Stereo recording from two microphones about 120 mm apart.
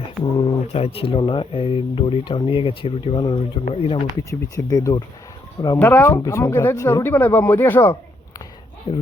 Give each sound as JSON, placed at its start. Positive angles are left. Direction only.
{"t": 0.2, "sound": "a sound", "side_deg": 35}
{"t": 0.7, "sound": "speech", "side_deg": 55}
{"t": 4.2, "sound": "speech", "side_deg": 30}
{"t": 5.8, "sound": "speech", "side_deg": 20}